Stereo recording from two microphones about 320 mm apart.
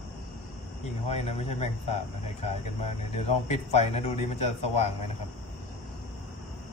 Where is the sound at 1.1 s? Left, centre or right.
Centre.